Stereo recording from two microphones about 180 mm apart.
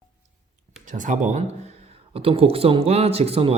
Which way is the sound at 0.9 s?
45° right (ahead or behind).